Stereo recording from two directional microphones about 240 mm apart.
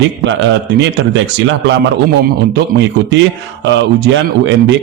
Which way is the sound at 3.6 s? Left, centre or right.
Right.